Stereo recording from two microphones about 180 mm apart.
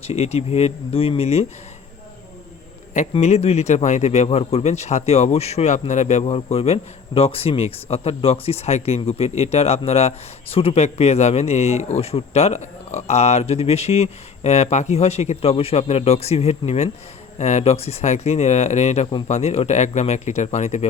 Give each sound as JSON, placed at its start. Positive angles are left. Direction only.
{"t": 0.0, "sound": "a man's voice", "side_deg": 35}
{"t": 2.9, "sound": "a man's voice", "side_deg": 40}